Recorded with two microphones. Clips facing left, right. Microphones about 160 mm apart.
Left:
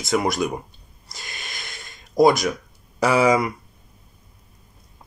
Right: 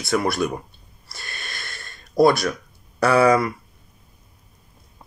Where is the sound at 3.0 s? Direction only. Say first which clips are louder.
Right 1 dB; 10° left (ahead or behind).